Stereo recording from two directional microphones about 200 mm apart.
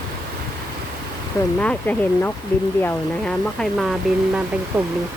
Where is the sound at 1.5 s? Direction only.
5° left (ahead or behind).